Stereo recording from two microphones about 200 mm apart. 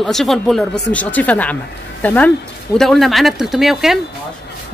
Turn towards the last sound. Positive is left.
turn(degrees=0)  # may be behind; listen again after turning